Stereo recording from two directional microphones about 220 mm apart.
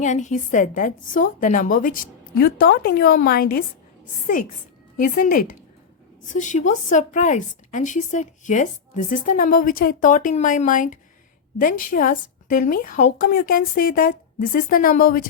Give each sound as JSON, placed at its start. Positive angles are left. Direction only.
{"t": 0.0, "sound": "a woman's voice", "side_deg": 35}
{"t": 4.9, "sound": "a woman's voice", "side_deg": 40}